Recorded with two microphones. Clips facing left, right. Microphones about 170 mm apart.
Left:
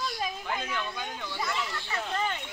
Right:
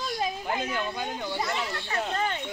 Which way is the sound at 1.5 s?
25° right (ahead or behind).